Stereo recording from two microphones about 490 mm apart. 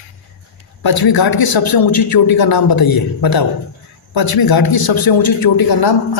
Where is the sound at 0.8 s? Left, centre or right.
Left.